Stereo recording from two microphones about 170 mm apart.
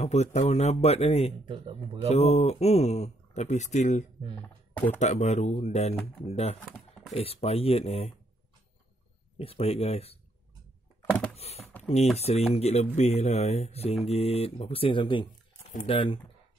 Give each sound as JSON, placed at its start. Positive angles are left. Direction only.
{"t": 0.0, "sound": "speech", "side_deg": 40}
{"t": 1.4, "sound": "a man's voice", "side_deg": -30}
{"t": 2.0, "sound": "speech", "side_deg": 40}
{"t": 4.4, "sound": "speech", "side_deg": 10}
{"t": 4.9, "sound": "speech", "side_deg": 40}
{"t": 9.4, "sound": "speech", "side_deg": 35}
{"t": 11.3, "sound": "typing", "side_deg": 35}
{"t": 11.6, "sound": "a sound", "side_deg": 10}
{"t": 12.2, "sound": "speech", "side_deg": 40}